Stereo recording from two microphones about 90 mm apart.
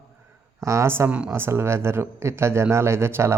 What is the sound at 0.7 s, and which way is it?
Speech, 30° right (ahead or behind).